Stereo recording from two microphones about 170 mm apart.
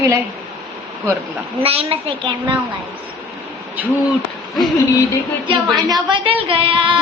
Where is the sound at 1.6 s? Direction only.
35° right (ahead or behind).